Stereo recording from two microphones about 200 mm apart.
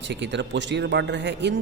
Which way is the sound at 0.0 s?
60° right (ahead or behind).